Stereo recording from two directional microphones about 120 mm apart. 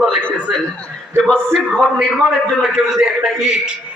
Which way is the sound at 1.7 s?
5° left (ahead or behind).